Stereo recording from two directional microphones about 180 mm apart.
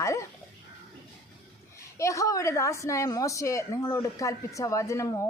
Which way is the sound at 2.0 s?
15° left (ahead or behind).